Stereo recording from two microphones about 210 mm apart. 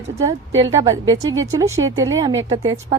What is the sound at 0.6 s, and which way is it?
Speech, 15° right (ahead or behind).